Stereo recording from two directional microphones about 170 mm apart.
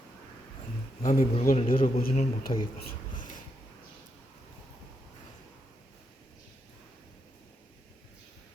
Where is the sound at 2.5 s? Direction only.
30° left (ahead or behind).